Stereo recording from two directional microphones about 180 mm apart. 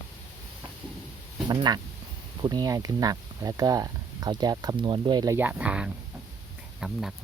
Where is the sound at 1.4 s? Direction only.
25° right (ahead or behind).